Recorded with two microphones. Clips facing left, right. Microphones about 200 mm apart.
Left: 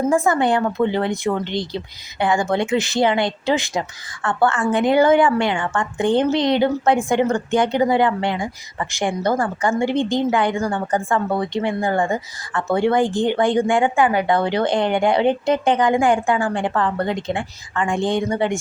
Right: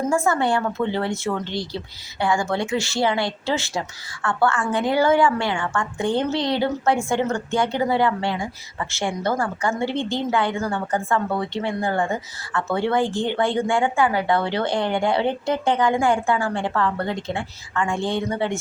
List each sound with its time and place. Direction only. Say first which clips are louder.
0.1 s a woman's voice: left 2 dB; 15° left (ahead or behind)